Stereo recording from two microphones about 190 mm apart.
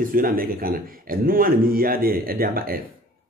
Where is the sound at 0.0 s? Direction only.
50° right (ahead or behind).